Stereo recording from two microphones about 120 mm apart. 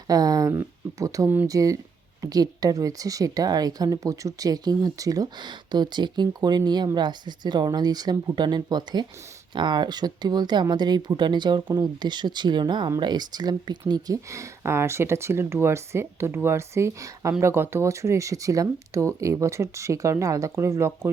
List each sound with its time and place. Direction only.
0.1 s a woman's voice: 30° right (ahead or behind)